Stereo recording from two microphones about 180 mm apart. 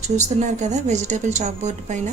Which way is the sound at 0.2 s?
40° right (ahead or behind).